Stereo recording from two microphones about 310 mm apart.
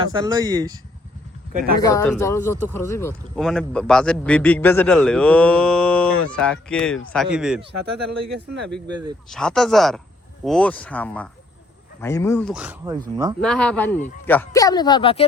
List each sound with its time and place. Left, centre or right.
0.1 s speech: centre
1.8 s a man's voice: centre
8.2 s speech: right
9.3 s a man's voice: centre
13.4 s a man's voice: centre